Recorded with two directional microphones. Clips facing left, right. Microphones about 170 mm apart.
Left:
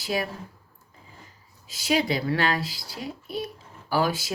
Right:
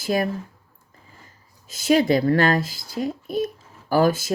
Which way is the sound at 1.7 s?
50° right (ahead or behind).